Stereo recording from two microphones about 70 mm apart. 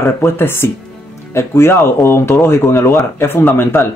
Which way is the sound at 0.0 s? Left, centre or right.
Left.